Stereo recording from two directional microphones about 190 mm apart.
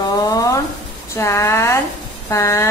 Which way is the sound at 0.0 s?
20° left (ahead or behind).